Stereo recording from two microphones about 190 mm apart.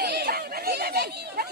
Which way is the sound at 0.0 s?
60° right (ahead or behind).